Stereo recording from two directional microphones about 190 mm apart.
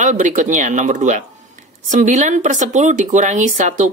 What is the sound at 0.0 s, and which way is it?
Speech, 40° right (ahead or behind).